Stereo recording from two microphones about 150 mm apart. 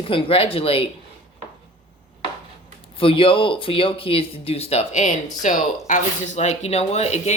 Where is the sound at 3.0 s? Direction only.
35° left (ahead or behind).